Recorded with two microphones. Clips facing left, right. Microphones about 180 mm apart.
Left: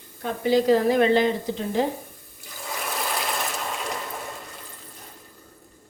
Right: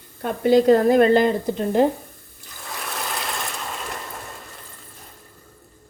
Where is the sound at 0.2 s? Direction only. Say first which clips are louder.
Right 5 dB; 55° right (ahead or behind).